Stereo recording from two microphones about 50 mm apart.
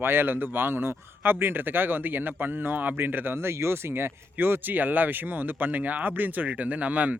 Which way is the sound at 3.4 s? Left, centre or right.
Right.